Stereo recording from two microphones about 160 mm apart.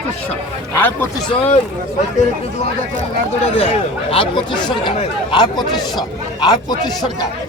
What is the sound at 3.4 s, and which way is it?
A man's voice, 40° left (ahead or behind).